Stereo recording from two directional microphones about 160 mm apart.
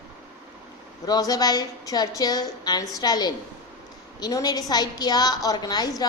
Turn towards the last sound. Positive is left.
turn(degrees=25)  # may be behind; listen again after turning